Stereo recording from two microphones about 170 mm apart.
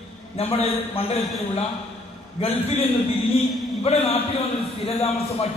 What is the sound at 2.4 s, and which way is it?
A man's voice, 35° left (ahead or behind).